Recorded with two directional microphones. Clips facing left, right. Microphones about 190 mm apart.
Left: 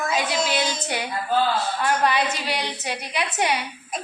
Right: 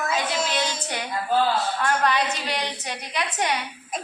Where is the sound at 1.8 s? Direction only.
10° left (ahead or behind).